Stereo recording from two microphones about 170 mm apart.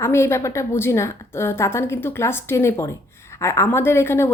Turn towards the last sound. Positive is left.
turn(degrees=15)  # may be behind; listen again after turning